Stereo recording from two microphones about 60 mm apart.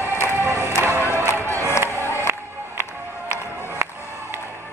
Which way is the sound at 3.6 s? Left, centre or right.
Right.